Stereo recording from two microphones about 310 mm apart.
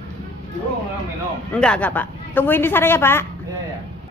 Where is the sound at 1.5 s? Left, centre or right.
Centre.